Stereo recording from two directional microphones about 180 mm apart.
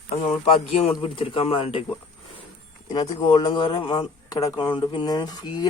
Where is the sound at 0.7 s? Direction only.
30° left (ahead or behind).